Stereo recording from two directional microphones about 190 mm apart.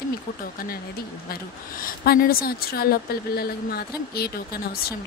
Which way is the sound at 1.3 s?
50° left (ahead or behind).